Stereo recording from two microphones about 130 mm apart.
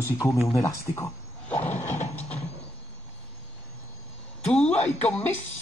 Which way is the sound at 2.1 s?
10° left (ahead or behind).